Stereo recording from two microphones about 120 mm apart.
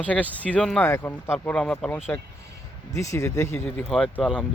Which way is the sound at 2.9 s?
25° left (ahead or behind).